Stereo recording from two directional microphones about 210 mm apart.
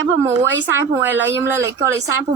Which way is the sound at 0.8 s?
10° right (ahead or behind).